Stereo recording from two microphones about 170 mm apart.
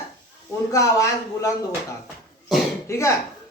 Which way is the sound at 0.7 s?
20° left (ahead or behind).